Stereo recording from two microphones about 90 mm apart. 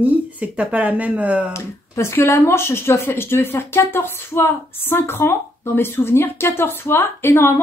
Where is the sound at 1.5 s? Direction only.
30° left (ahead or behind).